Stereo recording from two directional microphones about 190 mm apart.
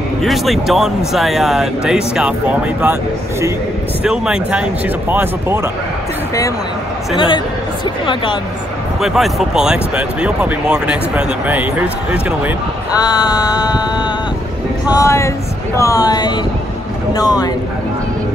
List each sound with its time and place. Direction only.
0.2 s speech: centre (ahead or behind)
7.2 s synthetic singing: 25° left (ahead or behind)
9.0 s speech: centre (ahead or behind)
12.9 s synthetic singing: 20° left (ahead or behind)
14.9 s speech: 15° left (ahead or behind)
17.1 s synthetic singing: 20° left (ahead or behind)